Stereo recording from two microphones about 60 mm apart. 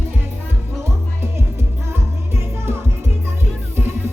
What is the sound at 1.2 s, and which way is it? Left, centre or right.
Music, right.